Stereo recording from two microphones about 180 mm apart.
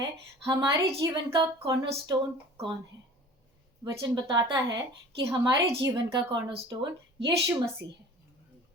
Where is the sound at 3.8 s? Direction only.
25° right (ahead or behind).